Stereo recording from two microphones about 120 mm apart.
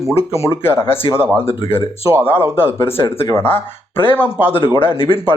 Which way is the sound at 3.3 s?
20° left (ahead or behind).